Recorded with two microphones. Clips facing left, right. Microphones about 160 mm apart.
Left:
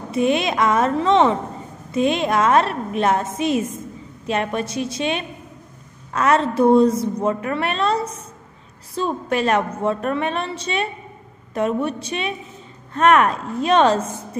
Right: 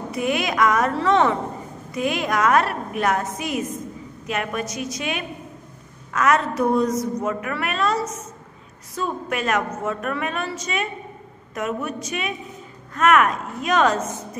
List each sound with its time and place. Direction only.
0.1 s a woman's voice: 25° left (ahead or behind)